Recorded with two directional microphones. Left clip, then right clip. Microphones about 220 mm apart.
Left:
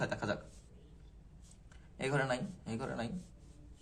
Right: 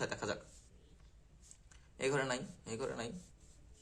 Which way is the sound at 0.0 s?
15° right (ahead or behind).